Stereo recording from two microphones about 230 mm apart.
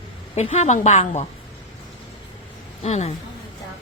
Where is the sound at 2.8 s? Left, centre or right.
Left.